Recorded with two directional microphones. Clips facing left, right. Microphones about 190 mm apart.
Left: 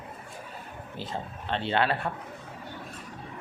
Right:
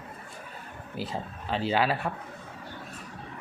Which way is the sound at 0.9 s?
5° right (ahead or behind).